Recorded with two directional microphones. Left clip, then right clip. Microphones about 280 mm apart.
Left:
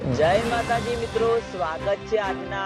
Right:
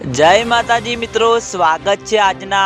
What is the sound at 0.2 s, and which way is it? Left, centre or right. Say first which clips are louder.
Speech: right 11 dB; right.